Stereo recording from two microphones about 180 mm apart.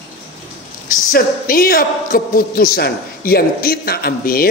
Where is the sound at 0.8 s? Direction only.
50° left (ahead or behind).